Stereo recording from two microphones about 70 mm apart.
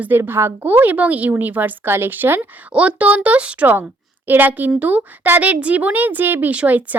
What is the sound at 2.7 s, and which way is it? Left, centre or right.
A child's voice, centre.